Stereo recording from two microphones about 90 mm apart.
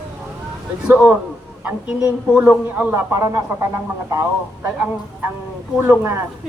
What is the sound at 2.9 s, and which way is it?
Speech, 30° right (ahead or behind).